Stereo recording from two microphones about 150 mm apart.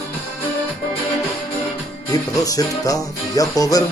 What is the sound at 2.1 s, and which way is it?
Music, 25° left (ahead or behind).